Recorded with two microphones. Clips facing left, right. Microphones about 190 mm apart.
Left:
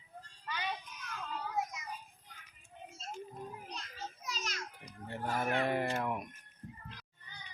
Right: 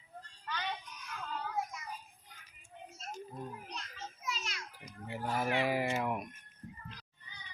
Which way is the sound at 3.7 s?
35° left (ahead or behind).